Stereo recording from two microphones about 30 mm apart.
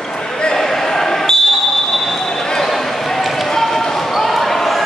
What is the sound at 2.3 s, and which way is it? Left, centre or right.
Basketball bounce, centre.